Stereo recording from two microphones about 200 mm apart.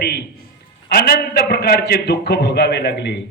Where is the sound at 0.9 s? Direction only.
50° left (ahead or behind).